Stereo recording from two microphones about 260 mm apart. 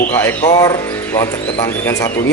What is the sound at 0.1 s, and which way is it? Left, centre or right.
Speech, centre.